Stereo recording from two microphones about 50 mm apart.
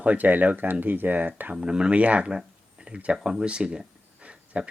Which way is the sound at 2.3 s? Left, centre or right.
Centre.